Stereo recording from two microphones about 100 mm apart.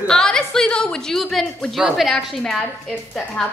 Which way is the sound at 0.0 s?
5° left (ahead or behind).